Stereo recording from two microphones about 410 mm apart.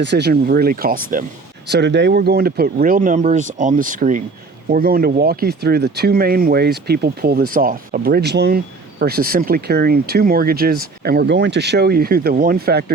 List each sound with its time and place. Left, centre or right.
0.0 s speech: right